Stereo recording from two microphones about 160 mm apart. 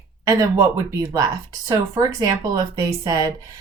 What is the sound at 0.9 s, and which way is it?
Speech, 20° right (ahead or behind).